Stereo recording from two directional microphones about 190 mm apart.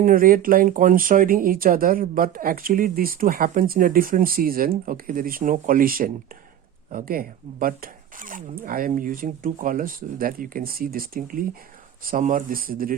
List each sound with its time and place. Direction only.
0.0 s speech: 50° right (ahead or behind)